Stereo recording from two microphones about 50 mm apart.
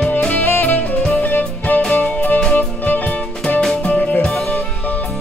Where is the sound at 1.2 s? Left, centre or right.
Left; by 4.4 s centre.